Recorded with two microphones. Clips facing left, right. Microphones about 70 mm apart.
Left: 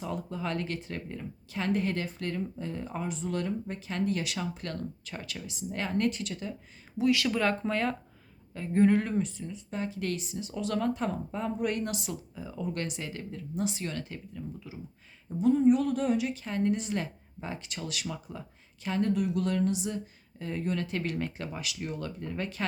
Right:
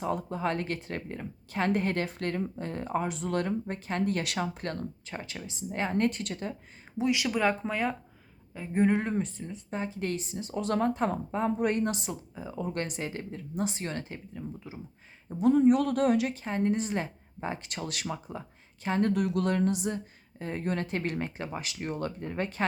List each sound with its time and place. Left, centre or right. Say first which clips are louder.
0.0 s speech: right 4 dB; right
6.1 s speech: even; right
7.0 s speech: even; centre
9.2 s a woman's voice: left 1 dB; right
9.7 s a woman's voice: right 1 dB; right
15.4 s speech: right 1 dB; right
16.3 s a woman's voice: right 1 dB; right
19.0 s a woman's voice: right 1 dB; right